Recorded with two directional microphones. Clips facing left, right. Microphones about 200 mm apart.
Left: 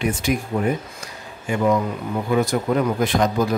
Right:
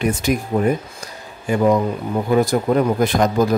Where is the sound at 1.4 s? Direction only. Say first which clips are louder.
Right 3 dB; 35° right (ahead or behind).